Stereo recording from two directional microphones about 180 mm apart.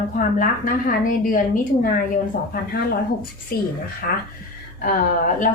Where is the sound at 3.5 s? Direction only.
60° left (ahead or behind).